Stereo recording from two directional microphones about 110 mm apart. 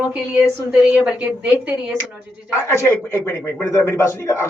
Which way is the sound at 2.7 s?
25° left (ahead or behind).